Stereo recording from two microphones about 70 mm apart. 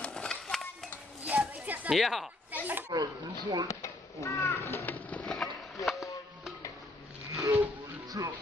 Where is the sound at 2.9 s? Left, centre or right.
Right.